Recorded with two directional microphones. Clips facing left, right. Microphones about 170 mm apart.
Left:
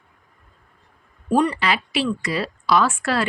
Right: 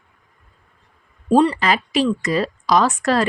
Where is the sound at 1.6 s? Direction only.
40° right (ahead or behind).